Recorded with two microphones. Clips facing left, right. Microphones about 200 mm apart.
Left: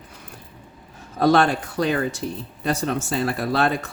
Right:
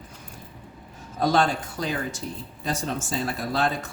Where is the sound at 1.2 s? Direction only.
65° left (ahead or behind).